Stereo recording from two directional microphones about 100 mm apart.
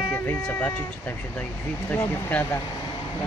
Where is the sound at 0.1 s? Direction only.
20° left (ahead or behind).